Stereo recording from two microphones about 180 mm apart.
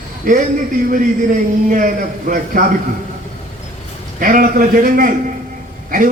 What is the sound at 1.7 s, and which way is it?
Speech, 50° right (ahead or behind).